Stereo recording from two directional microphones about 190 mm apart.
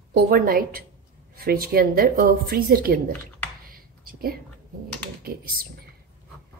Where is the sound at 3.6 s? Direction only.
50° right (ahead or behind).